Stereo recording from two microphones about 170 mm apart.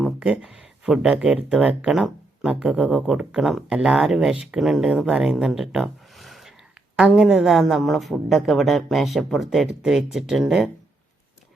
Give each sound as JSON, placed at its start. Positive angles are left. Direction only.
{"t": 0.0, "sound": "speech", "side_deg": -5}